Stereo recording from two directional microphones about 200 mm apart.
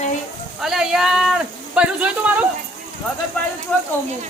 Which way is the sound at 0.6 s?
Centre (ahead or behind).